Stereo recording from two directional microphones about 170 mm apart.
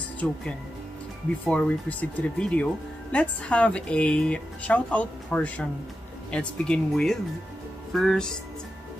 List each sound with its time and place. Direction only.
0.2 s speech: 5° left (ahead or behind)
1.4 s speech: 10° left (ahead or behind)